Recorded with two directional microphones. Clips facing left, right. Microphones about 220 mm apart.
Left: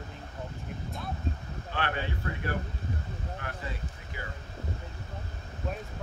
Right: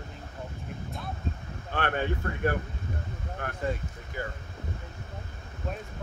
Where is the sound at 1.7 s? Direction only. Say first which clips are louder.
Right 4 dB; 50° right (ahead or behind).